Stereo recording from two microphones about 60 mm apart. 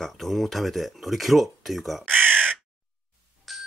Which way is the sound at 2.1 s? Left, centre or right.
Right.